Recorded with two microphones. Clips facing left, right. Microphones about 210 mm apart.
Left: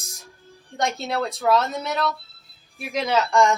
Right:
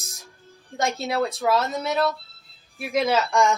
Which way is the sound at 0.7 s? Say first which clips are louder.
Right 1 dB; centre (ahead or behind).